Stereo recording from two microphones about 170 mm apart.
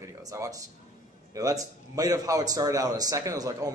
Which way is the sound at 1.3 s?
20° right (ahead or behind).